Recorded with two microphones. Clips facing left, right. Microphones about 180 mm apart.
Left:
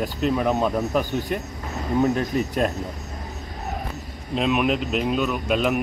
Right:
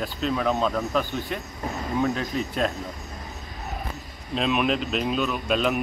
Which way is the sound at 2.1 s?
50° left (ahead or behind).